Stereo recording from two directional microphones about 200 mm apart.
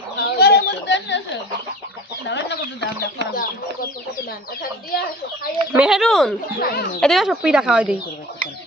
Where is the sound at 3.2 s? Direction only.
60° right (ahead or behind).